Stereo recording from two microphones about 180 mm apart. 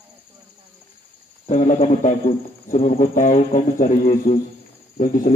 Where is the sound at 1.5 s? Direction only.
45° left (ahead or behind).